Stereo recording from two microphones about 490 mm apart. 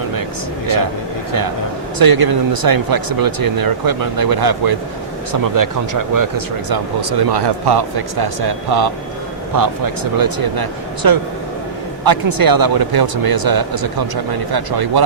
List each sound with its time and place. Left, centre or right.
2.0 s speech: right